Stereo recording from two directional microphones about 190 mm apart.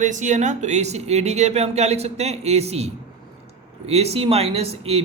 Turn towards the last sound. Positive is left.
turn(degrees=-30)  # may be behind; listen again after turning